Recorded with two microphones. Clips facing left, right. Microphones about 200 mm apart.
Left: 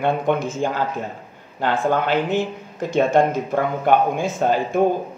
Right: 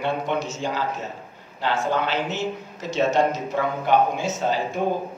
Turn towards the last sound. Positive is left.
turn(degrees=55)  # may be behind; listen again after turning